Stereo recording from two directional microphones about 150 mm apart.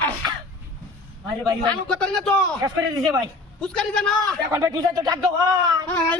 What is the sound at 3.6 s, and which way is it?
Speech, 5° left (ahead or behind).